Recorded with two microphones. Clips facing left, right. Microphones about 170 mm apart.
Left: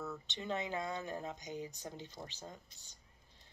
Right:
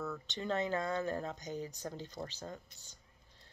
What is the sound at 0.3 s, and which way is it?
Speech, 20° left (ahead or behind).